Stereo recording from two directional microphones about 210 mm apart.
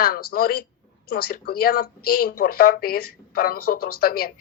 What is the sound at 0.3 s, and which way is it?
A woman's voice, 45° left (ahead or behind).